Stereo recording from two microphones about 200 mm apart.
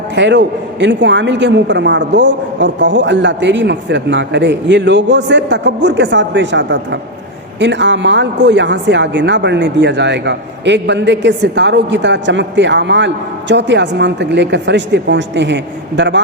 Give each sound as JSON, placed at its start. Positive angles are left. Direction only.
{"t": 0.2, "sound": "a man's voice", "side_deg": -65}